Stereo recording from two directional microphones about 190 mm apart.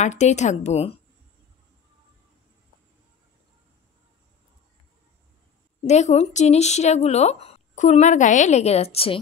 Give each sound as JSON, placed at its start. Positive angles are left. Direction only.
{"t": 0.0, "sound": "speech", "side_deg": 35}
{"t": 5.9, "sound": "speech", "side_deg": 35}